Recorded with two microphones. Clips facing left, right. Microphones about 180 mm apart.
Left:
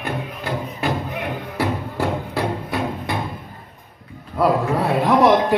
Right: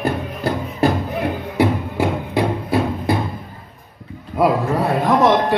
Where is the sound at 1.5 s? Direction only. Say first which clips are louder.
Right 5 dB; 15° right (ahead or behind).